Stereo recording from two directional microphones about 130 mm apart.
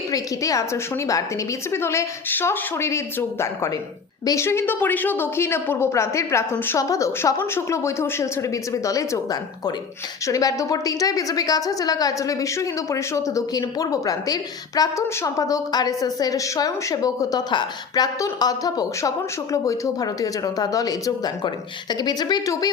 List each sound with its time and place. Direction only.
0.1 s a woman's voice: 25° left (ahead or behind)